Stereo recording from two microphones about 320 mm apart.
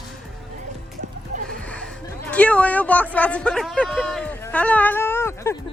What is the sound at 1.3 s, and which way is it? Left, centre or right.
Music, right.